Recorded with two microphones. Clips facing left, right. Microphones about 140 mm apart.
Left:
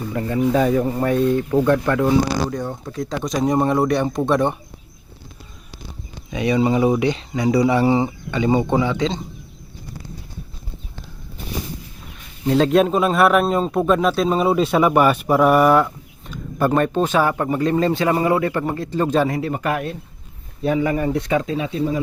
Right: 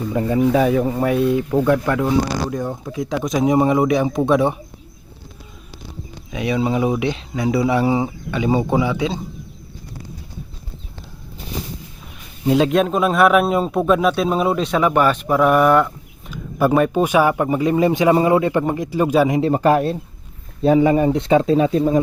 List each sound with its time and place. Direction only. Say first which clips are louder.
0.1 s speech: right 4 dB; 20° right (ahead or behind)
0.5 s a man's voice: right 1 dB; 5° right (ahead or behind)
6.3 s a man's voice: left 2 dB; centre (ahead or behind)
12.5 s a man's voice: even; 5° right (ahead or behind)
19.4 s speech: right 7 dB; 30° right (ahead or behind)